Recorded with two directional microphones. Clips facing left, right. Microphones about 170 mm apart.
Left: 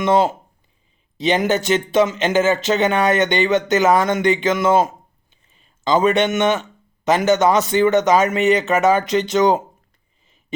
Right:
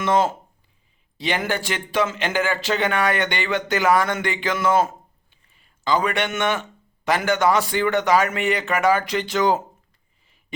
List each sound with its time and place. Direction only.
0.0 s speech: 15° left (ahead or behind)